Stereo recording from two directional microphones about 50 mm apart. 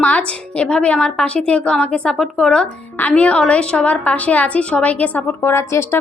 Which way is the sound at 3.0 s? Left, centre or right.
Left.